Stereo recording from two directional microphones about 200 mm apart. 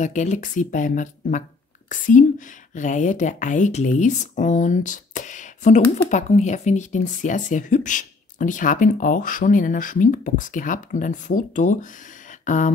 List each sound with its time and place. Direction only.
0.0 s a woman's voice: 40° left (ahead or behind)